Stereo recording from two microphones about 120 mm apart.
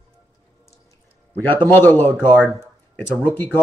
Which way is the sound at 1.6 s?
15° left (ahead or behind).